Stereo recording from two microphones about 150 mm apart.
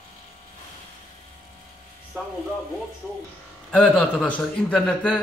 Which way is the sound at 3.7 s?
5° left (ahead or behind).